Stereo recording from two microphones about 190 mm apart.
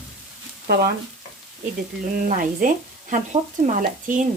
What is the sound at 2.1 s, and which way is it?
Speech, 45° right (ahead or behind).